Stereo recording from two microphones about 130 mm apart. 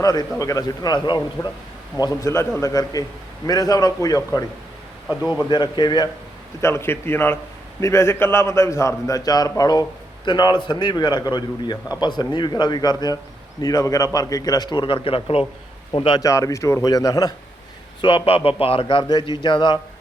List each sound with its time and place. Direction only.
0.0 s a man's voice: 30° left (ahead or behind)
2.0 s a man's voice: 20° left (ahead or behind)
5.0 s speech: 5° right (ahead or behind)
5.5 s a man's voice: 35° left (ahead or behind)
6.6 s a man's voice: 20° left (ahead or behind); by 16.2 s 35° left (ahead or behind)
16.2 s a man's voice: 25° left (ahead or behind)
18.0 s a man's voice: 45° left (ahead or behind)